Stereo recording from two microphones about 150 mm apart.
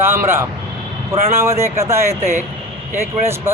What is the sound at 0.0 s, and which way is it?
A man's voice, 15° right (ahead or behind).